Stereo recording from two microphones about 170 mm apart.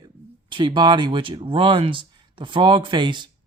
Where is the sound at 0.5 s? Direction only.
25° right (ahead or behind).